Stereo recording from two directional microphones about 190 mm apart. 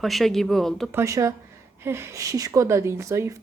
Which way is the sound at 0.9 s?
15° right (ahead or behind).